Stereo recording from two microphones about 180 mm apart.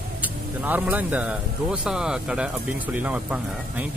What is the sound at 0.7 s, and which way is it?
Speech, 10° right (ahead or behind).